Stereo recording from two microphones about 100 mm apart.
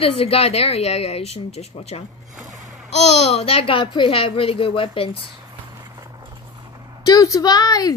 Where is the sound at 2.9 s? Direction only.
90° left; by 5.1 s 65° left (ahead or behind).